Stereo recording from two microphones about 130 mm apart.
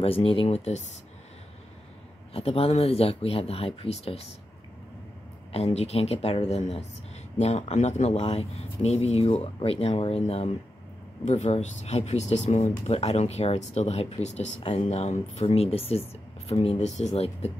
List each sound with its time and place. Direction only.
0.0 s speech: 45° left (ahead or behind)
2.3 s speech: 50° left (ahead or behind)
5.5 s speech: 55° left (ahead or behind)
11.2 s speech: 60° left (ahead or behind)